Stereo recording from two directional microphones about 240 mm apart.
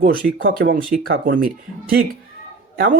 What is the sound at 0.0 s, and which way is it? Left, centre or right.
Speech, right.